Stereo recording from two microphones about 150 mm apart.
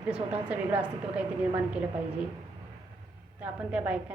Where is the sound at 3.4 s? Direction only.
10° right (ahead or behind).